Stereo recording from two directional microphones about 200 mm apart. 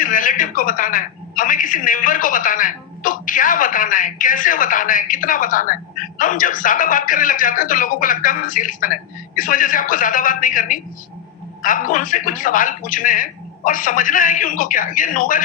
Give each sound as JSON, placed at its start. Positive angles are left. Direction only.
{"t": 0.0, "sound": "a woman's voice", "side_deg": 40}